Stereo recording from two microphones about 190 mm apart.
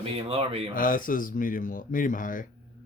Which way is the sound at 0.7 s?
45° left (ahead or behind).